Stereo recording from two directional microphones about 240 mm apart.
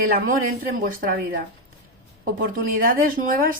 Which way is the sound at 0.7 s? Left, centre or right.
Right.